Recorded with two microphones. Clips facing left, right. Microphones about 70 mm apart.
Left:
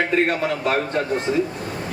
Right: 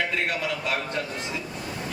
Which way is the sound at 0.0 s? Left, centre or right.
Left.